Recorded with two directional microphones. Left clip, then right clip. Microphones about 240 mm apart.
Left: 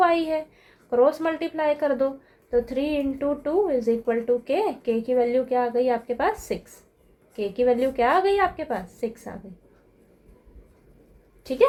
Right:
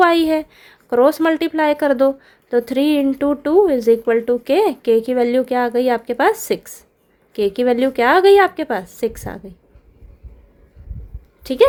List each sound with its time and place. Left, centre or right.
0.0 s a woman's voice: right
11.4 s a woman's voice: right